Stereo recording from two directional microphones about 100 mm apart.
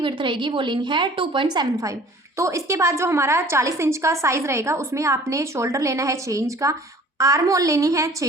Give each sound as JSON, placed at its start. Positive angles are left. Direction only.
{"t": 0.0, "sound": "a woman's voice", "side_deg": -55}
{"t": 2.4, "sound": "a woman's voice", "side_deg": -30}